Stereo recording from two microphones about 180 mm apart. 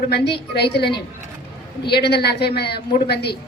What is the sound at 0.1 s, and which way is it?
A woman's voice, 65° left (ahead or behind).